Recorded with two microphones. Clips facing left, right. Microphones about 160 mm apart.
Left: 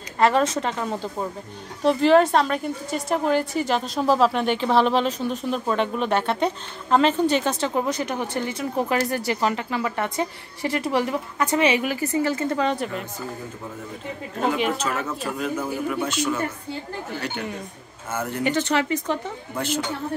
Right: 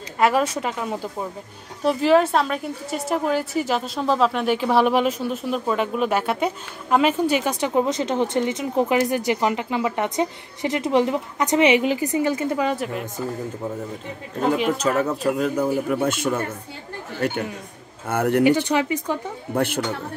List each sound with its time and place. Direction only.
0.2 s a woman's voice: 5° right (ahead or behind)
14.8 s speech: 40° right (ahead or behind)
18.0 s speech: 60° right (ahead or behind)
18.4 s a woman's voice: 10° right (ahead or behind)
19.5 s speech: 60° right (ahead or behind)